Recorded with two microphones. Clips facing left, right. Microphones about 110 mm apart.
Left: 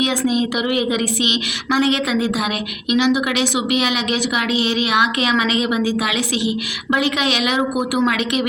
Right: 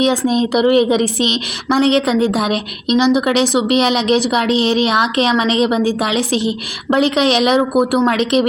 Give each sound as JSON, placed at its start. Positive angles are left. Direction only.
{"t": 0.0, "sound": "speech", "side_deg": -35}